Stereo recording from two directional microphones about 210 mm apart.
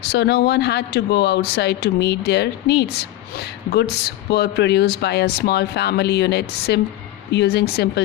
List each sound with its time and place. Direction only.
0.0 s speech: 50° left (ahead or behind)